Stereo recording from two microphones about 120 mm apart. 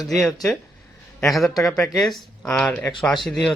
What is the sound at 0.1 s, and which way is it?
A man's voice, centre (ahead or behind).